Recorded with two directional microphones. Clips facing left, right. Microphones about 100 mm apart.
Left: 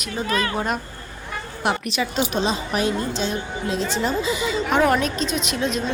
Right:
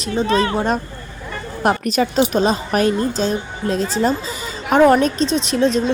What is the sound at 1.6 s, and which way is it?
A woman's voice, 45° right (ahead or behind).